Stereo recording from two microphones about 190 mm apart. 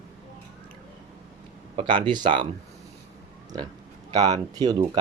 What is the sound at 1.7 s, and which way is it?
Speech, 30° right (ahead or behind).